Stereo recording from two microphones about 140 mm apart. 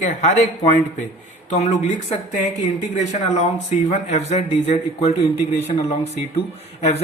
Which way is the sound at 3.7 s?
55° left (ahead or behind).